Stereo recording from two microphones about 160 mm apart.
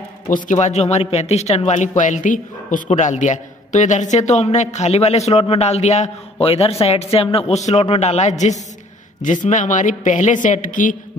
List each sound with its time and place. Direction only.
0.3 s a man's voice: 50° left (ahead or behind)